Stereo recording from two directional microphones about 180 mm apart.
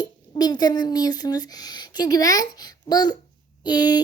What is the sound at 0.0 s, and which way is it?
Speech, 25° left (ahead or behind).